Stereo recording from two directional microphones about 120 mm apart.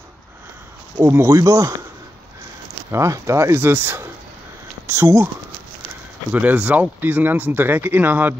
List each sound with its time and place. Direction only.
0.9 s speech: 20° right (ahead or behind)
2.9 s speech: 25° right (ahead or behind)
6.3 s speech: 15° right (ahead or behind)